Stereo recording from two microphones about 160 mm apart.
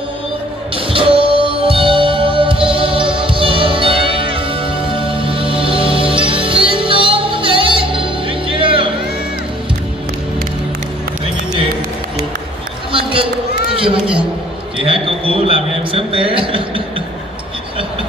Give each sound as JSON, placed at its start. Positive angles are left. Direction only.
{"t": 0.7, "sound": "music", "side_deg": -35}
{"t": 12.9, "sound": "run", "side_deg": -35}
{"t": 13.7, "sound": "a sound", "side_deg": -35}